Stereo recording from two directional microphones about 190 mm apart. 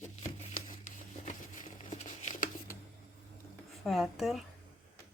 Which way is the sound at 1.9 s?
35° left (ahead or behind).